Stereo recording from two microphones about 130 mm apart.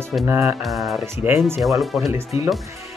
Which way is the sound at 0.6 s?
Centre (ahead or behind).